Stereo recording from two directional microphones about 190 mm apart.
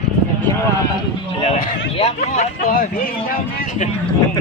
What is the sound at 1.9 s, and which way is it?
Speech, 35° left (ahead or behind).